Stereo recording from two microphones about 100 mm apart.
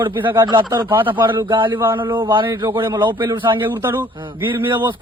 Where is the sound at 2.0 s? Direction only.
50° right (ahead or behind).